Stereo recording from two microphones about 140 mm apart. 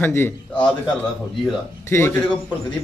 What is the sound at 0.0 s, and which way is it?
Speech, 15° left (ahead or behind).